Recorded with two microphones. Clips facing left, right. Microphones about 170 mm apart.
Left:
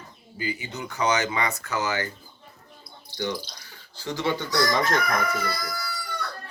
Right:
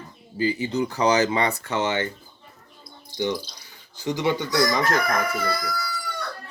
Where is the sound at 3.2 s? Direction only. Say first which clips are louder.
Right 4 dB; 15° right (ahead or behind).